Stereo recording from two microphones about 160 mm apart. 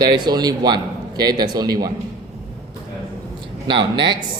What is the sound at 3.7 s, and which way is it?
Speech, 30° right (ahead or behind).